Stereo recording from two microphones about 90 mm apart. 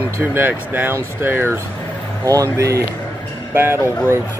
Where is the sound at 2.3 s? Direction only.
35° right (ahead or behind).